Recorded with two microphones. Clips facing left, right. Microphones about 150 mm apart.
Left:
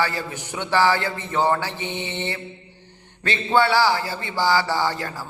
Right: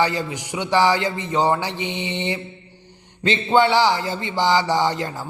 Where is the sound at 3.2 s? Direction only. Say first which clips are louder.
Right 3 dB; 20° right (ahead or behind).